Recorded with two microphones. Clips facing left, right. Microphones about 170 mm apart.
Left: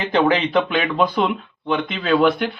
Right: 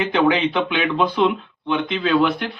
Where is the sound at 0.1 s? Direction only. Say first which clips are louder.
Left 4 dB; 40° left (ahead or behind).